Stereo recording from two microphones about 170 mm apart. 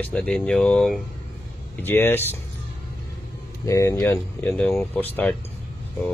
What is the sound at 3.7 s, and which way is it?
Speech, 20° left (ahead or behind).